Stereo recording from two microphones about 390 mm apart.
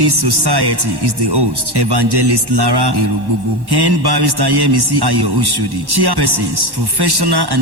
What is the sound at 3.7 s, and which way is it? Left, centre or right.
A man's voice, right.